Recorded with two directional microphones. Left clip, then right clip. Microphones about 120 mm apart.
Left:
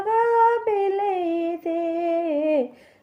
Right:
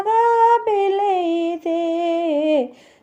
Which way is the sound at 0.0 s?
25° right (ahead or behind).